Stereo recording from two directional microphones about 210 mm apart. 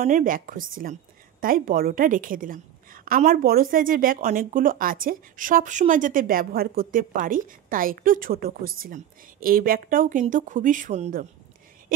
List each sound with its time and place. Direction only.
0.0 s a woman's voice: 40° right (ahead or behind)